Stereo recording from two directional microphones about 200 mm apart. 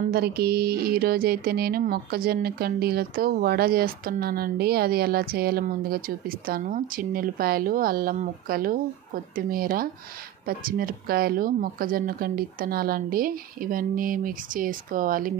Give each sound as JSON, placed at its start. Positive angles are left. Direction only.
{"t": 0.1, "sound": "speech", "side_deg": -50}